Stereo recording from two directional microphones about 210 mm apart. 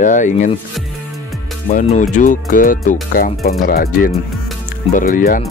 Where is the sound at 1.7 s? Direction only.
35° left (ahead or behind).